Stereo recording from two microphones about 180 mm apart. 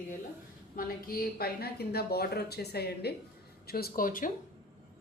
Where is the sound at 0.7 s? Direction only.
55° left (ahead or behind).